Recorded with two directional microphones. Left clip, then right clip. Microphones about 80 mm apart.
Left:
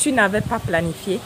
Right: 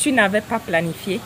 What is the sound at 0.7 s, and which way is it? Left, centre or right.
Speech, left.